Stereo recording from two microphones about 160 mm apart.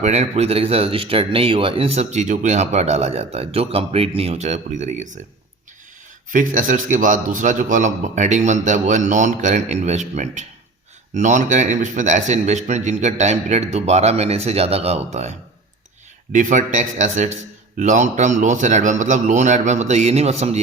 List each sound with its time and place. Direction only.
0.0 s speech: 40° right (ahead or behind)
6.3 s speech: 55° right (ahead or behind)